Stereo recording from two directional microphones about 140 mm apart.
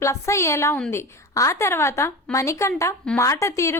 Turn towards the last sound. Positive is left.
turn(degrees=20)  # may be behind; listen again after turning